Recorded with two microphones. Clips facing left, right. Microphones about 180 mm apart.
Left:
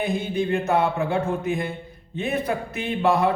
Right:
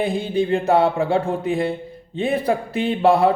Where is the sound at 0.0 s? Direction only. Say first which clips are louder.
Right 4 dB; 30° right (ahead or behind).